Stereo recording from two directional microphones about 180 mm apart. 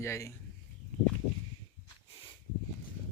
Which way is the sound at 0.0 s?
15° left (ahead or behind).